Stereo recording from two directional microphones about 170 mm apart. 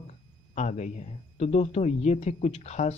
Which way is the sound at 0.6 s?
45° left (ahead or behind).